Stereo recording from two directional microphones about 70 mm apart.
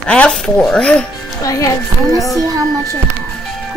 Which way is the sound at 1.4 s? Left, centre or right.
Left.